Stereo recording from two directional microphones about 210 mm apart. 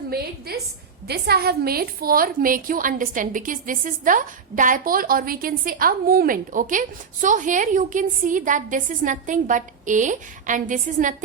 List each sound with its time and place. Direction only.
0.1 s a woman's voice: 50° right (ahead or behind)